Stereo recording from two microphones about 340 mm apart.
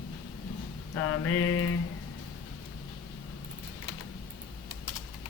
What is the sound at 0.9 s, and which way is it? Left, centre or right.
Mantra, left.